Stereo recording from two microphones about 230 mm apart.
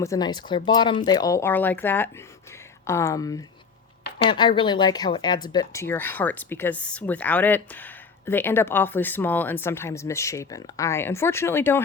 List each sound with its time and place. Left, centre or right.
0.0 s speech: centre